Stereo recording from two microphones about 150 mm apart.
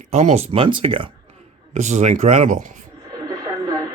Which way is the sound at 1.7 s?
50° right (ahead or behind).